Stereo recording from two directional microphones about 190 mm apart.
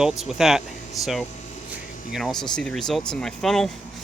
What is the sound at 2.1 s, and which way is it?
Speech, centre (ahead or behind).